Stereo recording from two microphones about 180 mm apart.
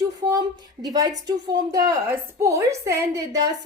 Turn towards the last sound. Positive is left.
turn(degrees=-15)  # may be behind; listen again after turning